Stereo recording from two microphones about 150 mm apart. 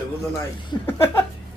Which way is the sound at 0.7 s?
30° left (ahead or behind).